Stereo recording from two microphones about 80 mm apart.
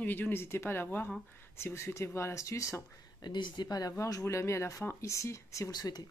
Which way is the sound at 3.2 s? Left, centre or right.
Left.